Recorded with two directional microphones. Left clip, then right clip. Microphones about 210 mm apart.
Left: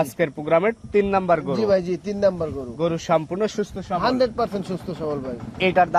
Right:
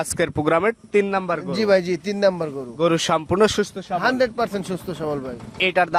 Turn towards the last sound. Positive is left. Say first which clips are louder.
# left 1 dB
turn(degrees=-25)  # may be behind; listen again after turning